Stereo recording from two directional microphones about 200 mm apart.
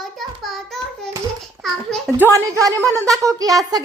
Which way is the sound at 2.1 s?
15° right (ahead or behind).